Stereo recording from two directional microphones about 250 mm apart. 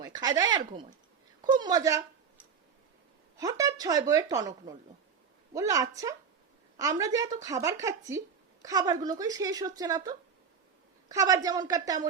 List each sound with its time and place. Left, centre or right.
0.0 s speech: centre
3.3 s speech: centre